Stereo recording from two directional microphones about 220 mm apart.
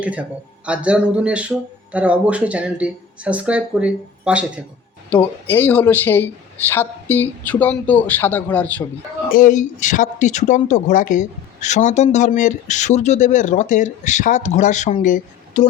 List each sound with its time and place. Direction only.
0.0 s speech: 5° right (ahead or behind)
5.0 s speech: 10° left (ahead or behind)
9.3 s speech: 35° left (ahead or behind)